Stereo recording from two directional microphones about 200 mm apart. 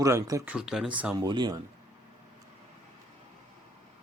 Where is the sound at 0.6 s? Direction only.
5° right (ahead or behind).